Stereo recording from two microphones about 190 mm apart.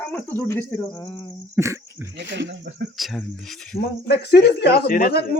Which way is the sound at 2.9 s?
Centre (ahead or behind).